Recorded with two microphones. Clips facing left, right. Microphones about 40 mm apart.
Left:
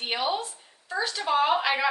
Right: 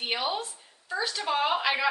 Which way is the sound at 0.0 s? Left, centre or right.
Centre.